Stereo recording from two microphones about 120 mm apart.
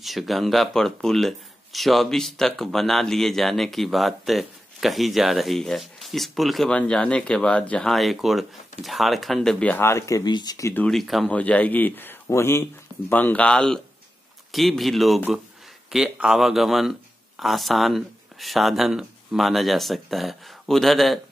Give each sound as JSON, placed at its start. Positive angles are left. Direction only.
{"t": 0.0, "sound": "speech", "side_deg": 0}
{"t": 10.9, "sound": "speech", "side_deg": 0}
{"t": 11.3, "sound": "a man's voice", "side_deg": 10}